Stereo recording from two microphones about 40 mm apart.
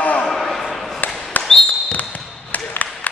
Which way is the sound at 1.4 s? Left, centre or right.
Left.